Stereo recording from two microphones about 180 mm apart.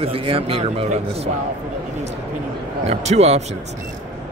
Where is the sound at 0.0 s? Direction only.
30° right (ahead or behind).